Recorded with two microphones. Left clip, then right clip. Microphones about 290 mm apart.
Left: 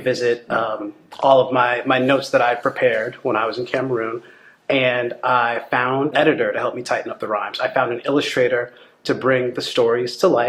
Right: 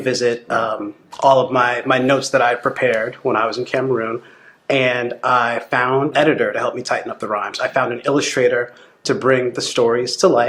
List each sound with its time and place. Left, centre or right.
0.0 s speech: left